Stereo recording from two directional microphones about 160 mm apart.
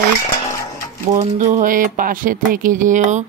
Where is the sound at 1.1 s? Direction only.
45° right (ahead or behind).